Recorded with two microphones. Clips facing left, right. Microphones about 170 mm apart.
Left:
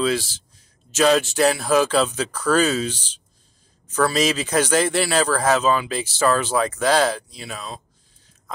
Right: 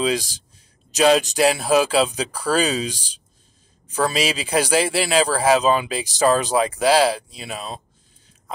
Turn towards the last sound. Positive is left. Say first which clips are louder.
# right 2 dB
turn(degrees=-20)  # may be behind; listen again after turning